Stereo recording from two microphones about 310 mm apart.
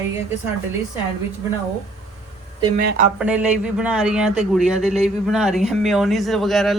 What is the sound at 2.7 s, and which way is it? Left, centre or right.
Speech, right.